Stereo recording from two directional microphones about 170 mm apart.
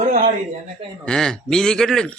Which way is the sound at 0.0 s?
55° right (ahead or behind).